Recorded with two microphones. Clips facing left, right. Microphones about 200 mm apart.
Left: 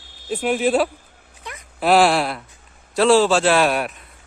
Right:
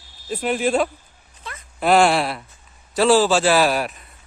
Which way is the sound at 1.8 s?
Centre (ahead or behind).